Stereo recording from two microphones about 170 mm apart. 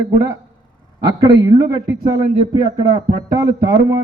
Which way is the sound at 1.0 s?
25° right (ahead or behind).